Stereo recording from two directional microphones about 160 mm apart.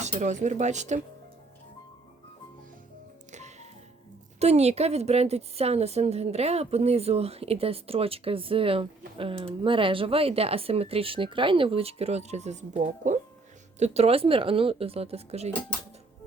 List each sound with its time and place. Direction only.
0.0 s speech: 45° right (ahead or behind)
3.3 s music: 45° right (ahead or behind)
4.4 s a woman's voice: 40° right (ahead or behind)